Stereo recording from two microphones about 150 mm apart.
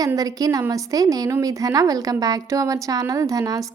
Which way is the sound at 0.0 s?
25° right (ahead or behind).